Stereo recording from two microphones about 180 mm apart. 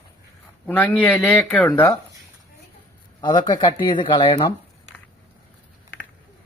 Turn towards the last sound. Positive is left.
turn(degrees=30)  # may be behind; listen again after turning